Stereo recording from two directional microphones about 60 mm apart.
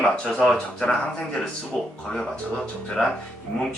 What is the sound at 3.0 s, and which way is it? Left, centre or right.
Speech, centre.